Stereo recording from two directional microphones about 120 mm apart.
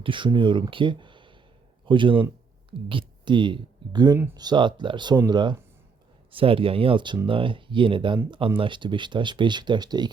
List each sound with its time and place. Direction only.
0.0 s speech: 45° right (ahead or behind)
6.3 s speech: 50° right (ahead or behind)